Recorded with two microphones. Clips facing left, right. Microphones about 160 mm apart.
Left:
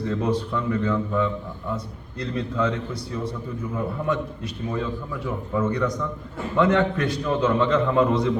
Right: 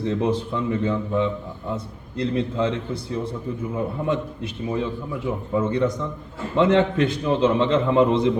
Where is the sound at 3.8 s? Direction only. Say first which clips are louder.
Even; 25° right (ahead or behind).